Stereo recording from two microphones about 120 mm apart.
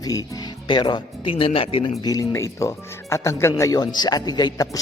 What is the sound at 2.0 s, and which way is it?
Speech, 30° left (ahead or behind).